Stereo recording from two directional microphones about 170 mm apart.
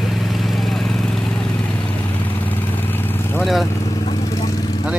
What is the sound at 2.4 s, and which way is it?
Vehicle, 10° left (ahead or behind).